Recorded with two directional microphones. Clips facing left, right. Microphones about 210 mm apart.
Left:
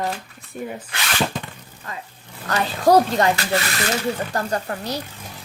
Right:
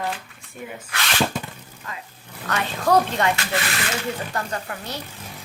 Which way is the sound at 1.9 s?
35° left (ahead or behind).